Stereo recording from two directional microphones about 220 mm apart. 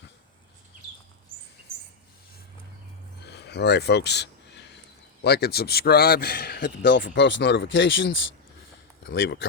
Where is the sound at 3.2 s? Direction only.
50° left (ahead or behind).